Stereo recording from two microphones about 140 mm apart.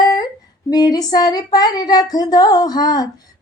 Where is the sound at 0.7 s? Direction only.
30° left (ahead or behind).